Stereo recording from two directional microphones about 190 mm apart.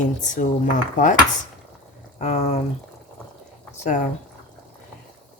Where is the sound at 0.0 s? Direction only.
40° left (ahead or behind).